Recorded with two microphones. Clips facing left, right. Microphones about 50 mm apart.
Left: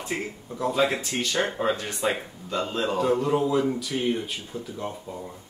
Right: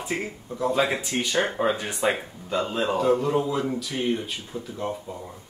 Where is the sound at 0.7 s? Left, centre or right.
Centre.